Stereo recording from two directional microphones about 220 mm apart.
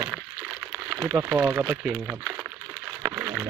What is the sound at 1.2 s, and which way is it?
Speech, 10° right (ahead or behind).